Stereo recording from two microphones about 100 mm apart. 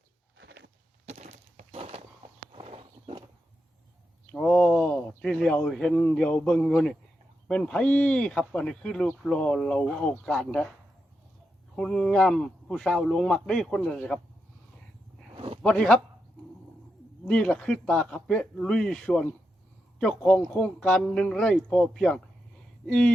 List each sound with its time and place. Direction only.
1.1 s a sound: 90° right; by 2.0 s 75° right (ahead or behind)
2.5 s horse: 75° right (ahead or behind)
4.3 s speech: 10° left (ahead or behind)
11.8 s speech: 5° left (ahead or behind)
15.6 s speech: 10° left (ahead or behind)
17.2 s speech: 10° left (ahead or behind)